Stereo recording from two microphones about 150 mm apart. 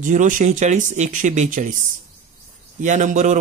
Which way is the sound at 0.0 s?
55° right (ahead or behind).